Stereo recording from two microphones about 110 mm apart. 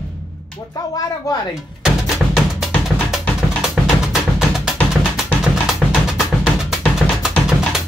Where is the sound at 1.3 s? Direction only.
35° left (ahead or behind).